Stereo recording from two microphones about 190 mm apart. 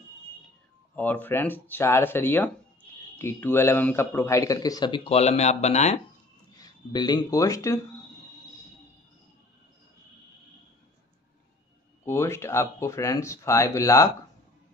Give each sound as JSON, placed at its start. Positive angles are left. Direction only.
{"t": 0.9, "sound": "a man's voice", "side_deg": 10}
{"t": 6.5, "sound": "speech", "side_deg": 20}
{"t": 12.0, "sound": "a man's voice", "side_deg": 15}